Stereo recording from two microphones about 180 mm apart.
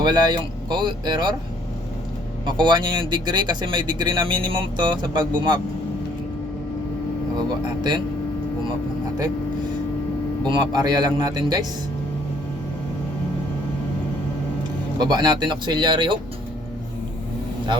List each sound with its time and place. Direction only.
0.0 s speech: 25° right (ahead or behind)
2.5 s speech: 25° right (ahead or behind)
10.4 s speech: 25° right (ahead or behind)
14.9 s speech: 25° right (ahead or behind)